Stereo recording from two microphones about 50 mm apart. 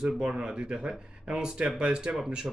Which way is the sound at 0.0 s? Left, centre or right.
Centre.